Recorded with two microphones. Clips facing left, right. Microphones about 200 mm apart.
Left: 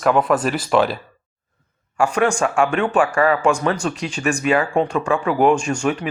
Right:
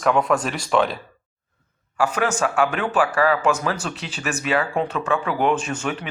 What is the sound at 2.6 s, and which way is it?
Speech, 5° right (ahead or behind).